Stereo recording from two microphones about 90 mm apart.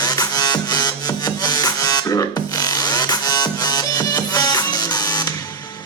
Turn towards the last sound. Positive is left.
turn(degrees=45)  # may be behind; listen again after turning